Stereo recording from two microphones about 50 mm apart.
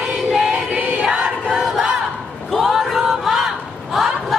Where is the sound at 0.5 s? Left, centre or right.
Right.